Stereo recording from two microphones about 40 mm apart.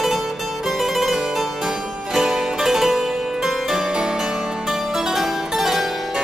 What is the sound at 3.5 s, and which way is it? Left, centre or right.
Harpsichord, centre.